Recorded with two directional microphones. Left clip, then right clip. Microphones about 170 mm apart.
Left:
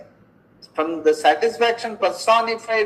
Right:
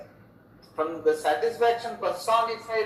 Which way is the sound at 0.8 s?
40° left (ahead or behind).